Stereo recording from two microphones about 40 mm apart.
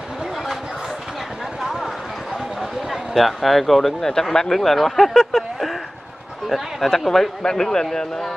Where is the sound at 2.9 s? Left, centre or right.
Centre.